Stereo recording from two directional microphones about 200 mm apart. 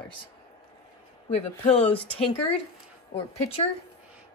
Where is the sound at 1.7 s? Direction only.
30° left (ahead or behind).